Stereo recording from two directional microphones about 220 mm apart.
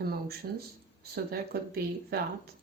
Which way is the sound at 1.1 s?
45° right (ahead or behind).